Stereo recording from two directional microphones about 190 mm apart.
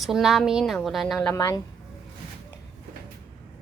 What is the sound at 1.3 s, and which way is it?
Speech, 15° left (ahead or behind).